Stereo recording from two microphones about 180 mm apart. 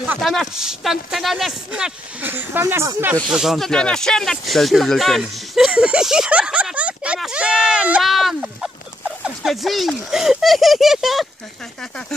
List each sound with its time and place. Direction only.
0.0 s speech: 5° right (ahead or behind)
3.3 s speech: 5° right (ahead or behind)